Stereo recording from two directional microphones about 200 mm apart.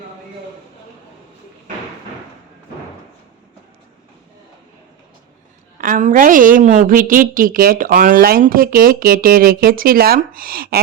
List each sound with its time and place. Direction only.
5.8 s a woman's voice: 40° right (ahead or behind)